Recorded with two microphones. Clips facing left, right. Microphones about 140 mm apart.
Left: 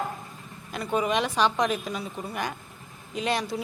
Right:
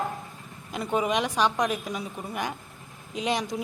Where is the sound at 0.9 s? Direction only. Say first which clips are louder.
Even; 15° right (ahead or behind).